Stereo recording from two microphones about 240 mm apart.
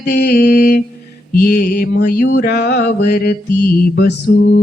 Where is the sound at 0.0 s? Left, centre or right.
Left.